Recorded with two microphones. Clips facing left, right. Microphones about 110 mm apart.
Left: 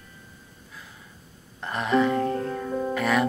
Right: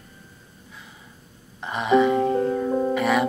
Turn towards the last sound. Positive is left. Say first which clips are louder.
# right 2 dB
turn(degrees=-5)  # may be behind; listen again after turning